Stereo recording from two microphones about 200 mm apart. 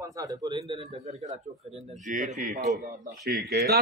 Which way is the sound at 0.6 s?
30° right (ahead or behind).